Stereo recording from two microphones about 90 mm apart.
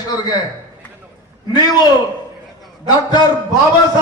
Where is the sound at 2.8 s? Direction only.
50° left (ahead or behind).